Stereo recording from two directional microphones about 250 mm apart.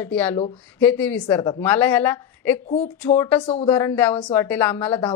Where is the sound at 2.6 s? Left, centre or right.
Left.